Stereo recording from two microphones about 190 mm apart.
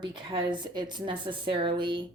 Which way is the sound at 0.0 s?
25° right (ahead or behind).